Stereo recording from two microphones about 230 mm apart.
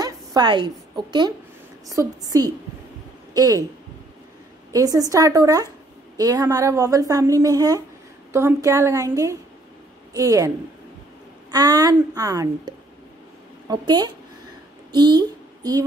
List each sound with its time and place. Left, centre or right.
0.0 s a woman's voice: centre
4.7 s a woman's voice: centre
11.5 s a woman's voice: centre
14.9 s a sound: centre